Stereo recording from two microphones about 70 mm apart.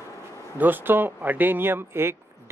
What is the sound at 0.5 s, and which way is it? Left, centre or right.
Speech, right.